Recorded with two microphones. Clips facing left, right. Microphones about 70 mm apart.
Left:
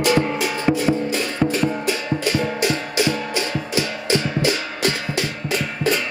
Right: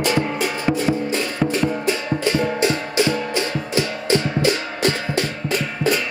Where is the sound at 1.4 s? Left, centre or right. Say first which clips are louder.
Even; right.